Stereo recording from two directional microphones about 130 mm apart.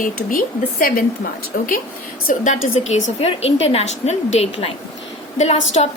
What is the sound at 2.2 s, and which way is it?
A woman's voice, 70° left (ahead or behind).